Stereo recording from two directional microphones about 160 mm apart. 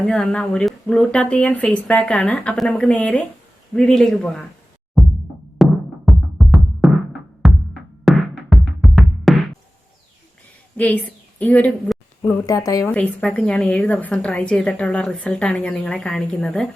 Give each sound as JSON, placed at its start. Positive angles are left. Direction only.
{"t": 0.0, "sound": "speech", "side_deg": 5}
{"t": 5.0, "sound": "music", "side_deg": -15}
{"t": 5.6, "sound": "music", "side_deg": 0}
{"t": 8.0, "sound": "music", "side_deg": 0}
{"t": 10.8, "sound": "a woman's voice", "side_deg": 10}
{"t": 12.5, "sound": "a woman's voice", "side_deg": 20}
{"t": 12.9, "sound": "a woman's voice", "side_deg": 10}